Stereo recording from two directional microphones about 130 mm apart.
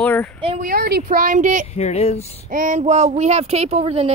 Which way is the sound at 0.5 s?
90° right.